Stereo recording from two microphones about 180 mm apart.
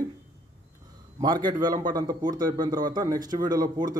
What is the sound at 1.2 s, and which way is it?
Speech, 25° right (ahead or behind).